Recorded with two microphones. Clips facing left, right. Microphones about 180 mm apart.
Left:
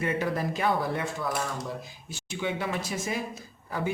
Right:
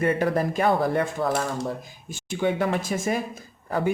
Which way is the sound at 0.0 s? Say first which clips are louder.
Right 6 dB; 50° right (ahead or behind).